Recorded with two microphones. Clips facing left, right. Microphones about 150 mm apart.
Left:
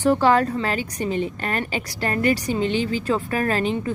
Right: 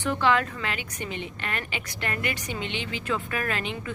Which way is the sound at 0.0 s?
40° left (ahead or behind).